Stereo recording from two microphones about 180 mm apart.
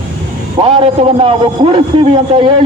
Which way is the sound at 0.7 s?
30° right (ahead or behind).